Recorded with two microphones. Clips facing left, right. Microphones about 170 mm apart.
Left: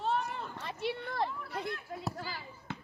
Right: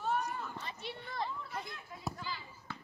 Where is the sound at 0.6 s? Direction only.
65° left (ahead or behind).